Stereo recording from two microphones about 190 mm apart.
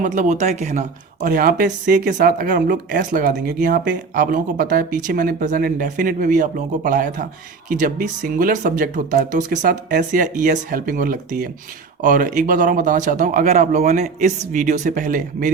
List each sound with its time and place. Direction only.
0.0 s speech: 40° right (ahead or behind)